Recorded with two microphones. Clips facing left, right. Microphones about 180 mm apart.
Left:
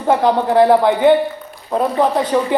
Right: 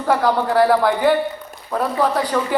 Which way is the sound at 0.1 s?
20° left (ahead or behind).